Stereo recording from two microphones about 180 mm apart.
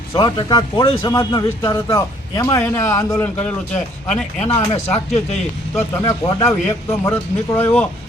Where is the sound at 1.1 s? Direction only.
20° left (ahead or behind).